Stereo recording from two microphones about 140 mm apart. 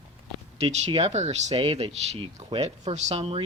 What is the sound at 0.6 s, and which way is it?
Speech, 40° right (ahead or behind).